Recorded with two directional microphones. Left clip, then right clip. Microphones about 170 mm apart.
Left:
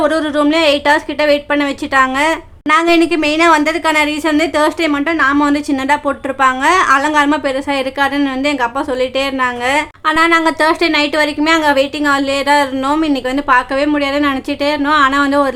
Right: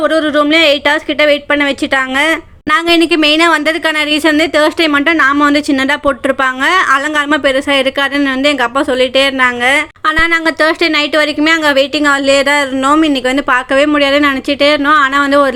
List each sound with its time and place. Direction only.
0.0 s a woman's voice: 10° right (ahead or behind)